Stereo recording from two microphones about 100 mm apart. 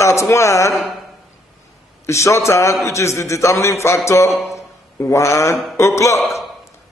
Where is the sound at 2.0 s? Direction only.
30° left (ahead or behind).